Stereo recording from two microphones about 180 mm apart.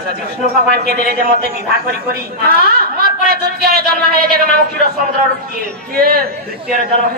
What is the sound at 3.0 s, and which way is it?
A man's voice, 55° right (ahead or behind).